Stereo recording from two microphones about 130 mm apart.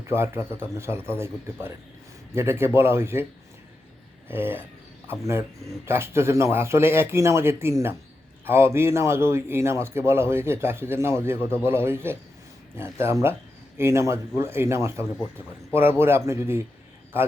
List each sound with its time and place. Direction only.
0.1 s a man's voice: 20° right (ahead or behind)
4.3 s a man's voice: 15° right (ahead or behind)